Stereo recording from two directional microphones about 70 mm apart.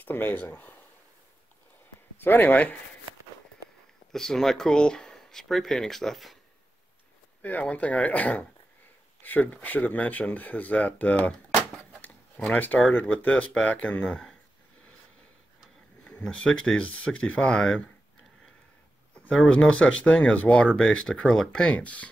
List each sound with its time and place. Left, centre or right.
0.0 s speech: left
2.1 s speech: left
4.1 s speech: centre
7.7 s speech: centre
12.4 s speech: left
14.0 s speech: centre
16.0 s speech: centre
19.5 s speech: centre